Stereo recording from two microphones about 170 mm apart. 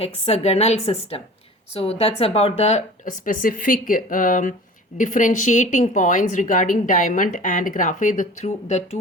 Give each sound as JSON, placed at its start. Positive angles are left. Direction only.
{"t": 0.0, "sound": "a woman's voice", "side_deg": 40}